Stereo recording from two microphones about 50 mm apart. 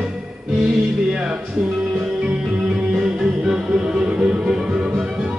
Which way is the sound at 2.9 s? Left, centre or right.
Centre.